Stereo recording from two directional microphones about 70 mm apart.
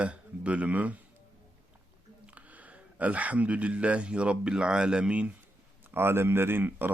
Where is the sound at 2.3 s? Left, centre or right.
Right.